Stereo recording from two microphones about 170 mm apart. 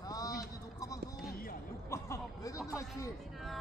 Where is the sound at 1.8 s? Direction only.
15° left (ahead or behind).